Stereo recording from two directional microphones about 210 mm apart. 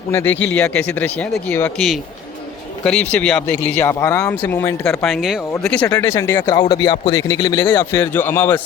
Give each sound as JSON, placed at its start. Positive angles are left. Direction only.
{"t": 0.1, "sound": "speech", "side_deg": 10}